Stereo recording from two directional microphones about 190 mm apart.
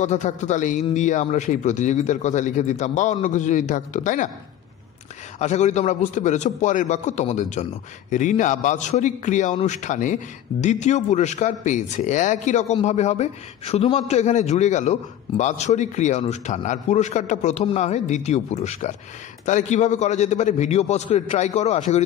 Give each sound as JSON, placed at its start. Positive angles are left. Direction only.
{"t": 0.0, "sound": "a man's voice", "side_deg": 40}
{"t": 5.4, "sound": "a man's voice", "side_deg": 40}